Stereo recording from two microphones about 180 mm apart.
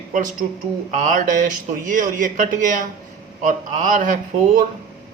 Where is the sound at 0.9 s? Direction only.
45° right (ahead or behind).